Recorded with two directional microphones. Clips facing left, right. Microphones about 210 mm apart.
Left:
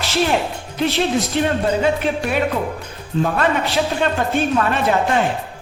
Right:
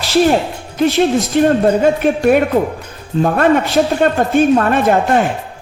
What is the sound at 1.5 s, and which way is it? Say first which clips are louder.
Speech: right 8 dB; 50° right (ahead or behind).